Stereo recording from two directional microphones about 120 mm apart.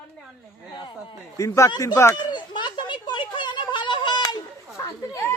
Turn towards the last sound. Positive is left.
turn(degrees=30)  # may be behind; listen again after turning